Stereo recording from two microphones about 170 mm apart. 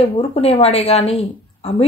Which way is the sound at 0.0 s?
35° left (ahead or behind).